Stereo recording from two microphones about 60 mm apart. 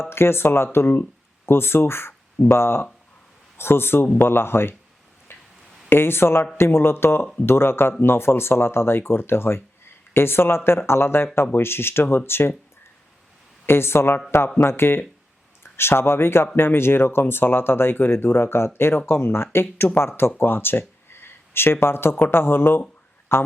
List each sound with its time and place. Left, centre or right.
0.0 s speech: left
5.3 s music: left
5.9 s speech: left
13.7 s a man's voice: left